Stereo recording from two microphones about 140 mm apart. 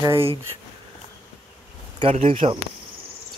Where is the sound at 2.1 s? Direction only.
45° right (ahead or behind).